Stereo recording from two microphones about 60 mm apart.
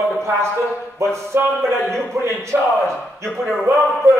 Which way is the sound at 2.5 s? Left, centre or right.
Right.